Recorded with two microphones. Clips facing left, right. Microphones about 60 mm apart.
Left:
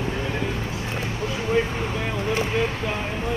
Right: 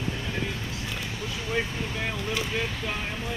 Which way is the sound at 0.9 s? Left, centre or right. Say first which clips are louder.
Left 8 dB; left.